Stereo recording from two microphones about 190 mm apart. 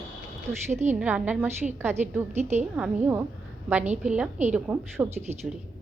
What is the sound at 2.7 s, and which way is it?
A woman's voice, 5° right (ahead or behind).